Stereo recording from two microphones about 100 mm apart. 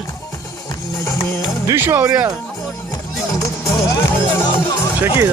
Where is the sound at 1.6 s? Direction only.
25° right (ahead or behind).